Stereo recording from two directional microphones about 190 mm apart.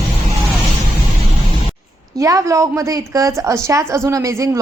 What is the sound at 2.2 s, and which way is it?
A woman's voice, 15° right (ahead or behind).